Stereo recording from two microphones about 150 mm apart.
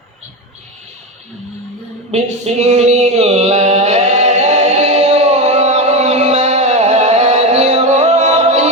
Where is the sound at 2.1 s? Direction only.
45° right (ahead or behind).